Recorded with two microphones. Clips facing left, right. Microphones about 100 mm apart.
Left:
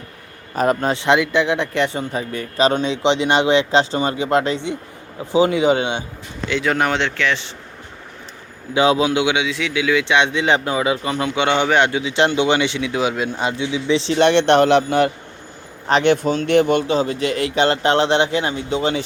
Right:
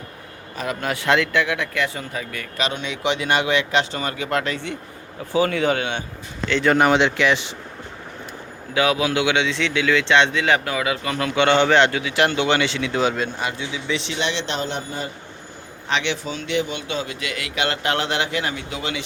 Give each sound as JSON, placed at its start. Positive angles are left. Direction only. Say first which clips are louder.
{"t": 0.5, "sound": "a man's voice", "louder": "left 9 dB", "side_deg": 45}
{"t": 0.9, "sound": "speech", "louder": "left 3 dB", "side_deg": 20}
{"t": 6.5, "sound": "speech", "louder": "right 2 dB", "side_deg": 0}
{"t": 8.7, "sound": "speech", "louder": "left 4 dB", "side_deg": 25}
{"t": 14.1, "sound": "a man's voice", "louder": "left 12 dB", "side_deg": 55}
{"t": 15.9, "sound": "a man's voice", "louder": "left 9 dB", "side_deg": 45}
{"t": 16.8, "sound": "speech", "louder": "left 9 dB", "side_deg": 35}